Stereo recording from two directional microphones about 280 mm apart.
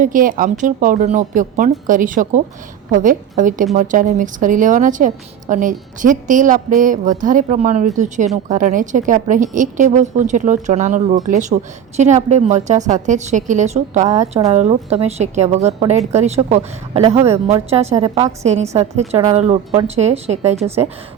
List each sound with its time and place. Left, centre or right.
0.0 s a woman's voice: right